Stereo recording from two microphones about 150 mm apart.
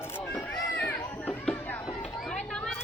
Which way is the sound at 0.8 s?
10° left (ahead or behind).